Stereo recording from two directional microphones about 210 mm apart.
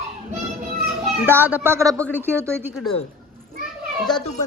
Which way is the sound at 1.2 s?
10° right (ahead or behind).